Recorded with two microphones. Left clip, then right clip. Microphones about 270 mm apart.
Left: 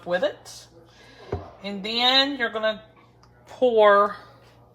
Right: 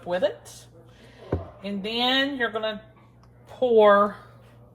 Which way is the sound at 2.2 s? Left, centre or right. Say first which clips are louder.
Left 2 dB; left.